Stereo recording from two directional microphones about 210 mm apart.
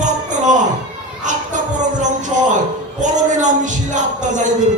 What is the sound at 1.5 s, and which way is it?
Music, 35° right (ahead or behind).